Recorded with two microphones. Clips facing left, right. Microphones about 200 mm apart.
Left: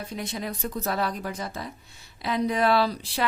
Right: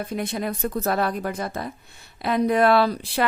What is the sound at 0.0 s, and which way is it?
Speech, 55° right (ahead or behind).